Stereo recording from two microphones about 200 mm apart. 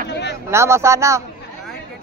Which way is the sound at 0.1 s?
60° left (ahead or behind).